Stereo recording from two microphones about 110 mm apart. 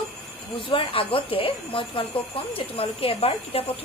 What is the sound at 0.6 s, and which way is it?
Speech, 50° left (ahead or behind).